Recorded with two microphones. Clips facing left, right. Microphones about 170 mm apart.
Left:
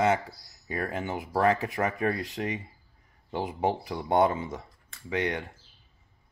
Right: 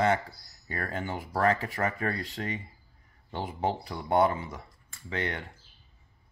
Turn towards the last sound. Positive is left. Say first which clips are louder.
# left 4 dB
turn(degrees=15)  # may be behind; listen again after turning